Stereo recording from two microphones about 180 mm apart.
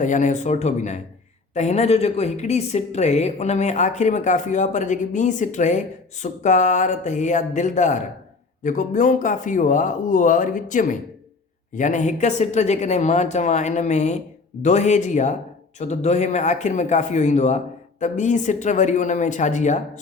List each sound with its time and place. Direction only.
0.0 s a woman's voice: 45° left (ahead or behind)